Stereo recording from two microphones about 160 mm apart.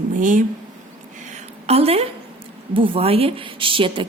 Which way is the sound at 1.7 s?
40° right (ahead or behind).